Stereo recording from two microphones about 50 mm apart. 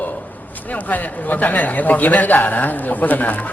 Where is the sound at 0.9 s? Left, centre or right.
Left.